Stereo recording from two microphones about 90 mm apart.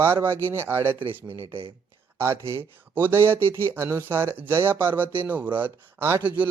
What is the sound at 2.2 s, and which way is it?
Speech, 30° right (ahead or behind).